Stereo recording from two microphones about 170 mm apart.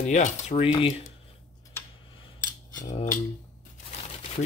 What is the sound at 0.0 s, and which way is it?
Speech, 45° left (ahead or behind).